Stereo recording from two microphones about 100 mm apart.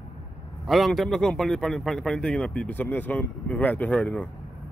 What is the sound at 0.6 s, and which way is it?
A man's voice, centre (ahead or behind).